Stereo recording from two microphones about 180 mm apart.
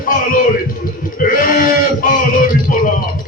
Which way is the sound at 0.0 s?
50° left (ahead or behind).